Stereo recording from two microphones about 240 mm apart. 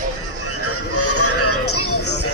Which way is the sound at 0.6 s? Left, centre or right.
Left.